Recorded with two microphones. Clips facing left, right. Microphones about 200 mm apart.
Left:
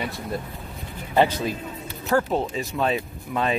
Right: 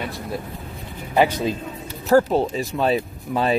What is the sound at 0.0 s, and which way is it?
Speech, centre (ahead or behind).